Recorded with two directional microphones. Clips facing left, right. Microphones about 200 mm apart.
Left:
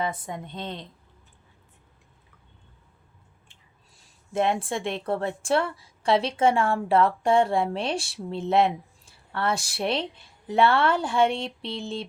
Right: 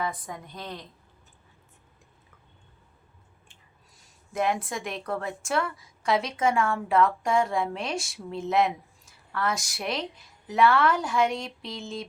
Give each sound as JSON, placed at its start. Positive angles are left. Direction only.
{"t": 0.0, "sound": "a woman's voice", "side_deg": 25}
{"t": 4.3, "sound": "a woman's voice", "side_deg": 25}